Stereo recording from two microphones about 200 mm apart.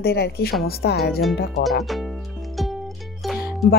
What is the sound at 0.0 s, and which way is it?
Speech, 50° left (ahead or behind).